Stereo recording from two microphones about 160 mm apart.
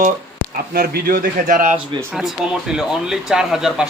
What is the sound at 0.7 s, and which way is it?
A man's voice, 70° right (ahead or behind).